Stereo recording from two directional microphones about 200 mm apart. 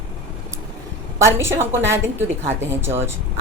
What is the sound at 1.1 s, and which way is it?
A woman's voice, 15° right (ahead or behind).